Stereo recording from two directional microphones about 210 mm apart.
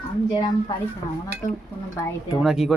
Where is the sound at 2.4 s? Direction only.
Centre (ahead or behind).